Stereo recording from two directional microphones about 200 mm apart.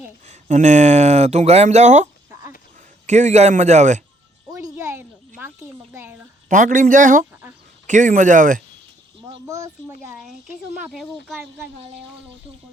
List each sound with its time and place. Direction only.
0.3 s speech: 35° right (ahead or behind)
3.1 s speech: 35° right (ahead or behind)
4.5 s music: 15° right (ahead or behind)
5.4 s a sound: 10° right (ahead or behind)
6.5 s speech: 40° right (ahead or behind)
9.3 s a sound: 15° right (ahead or behind)